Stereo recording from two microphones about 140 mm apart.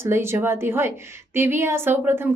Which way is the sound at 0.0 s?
20° right (ahead or behind).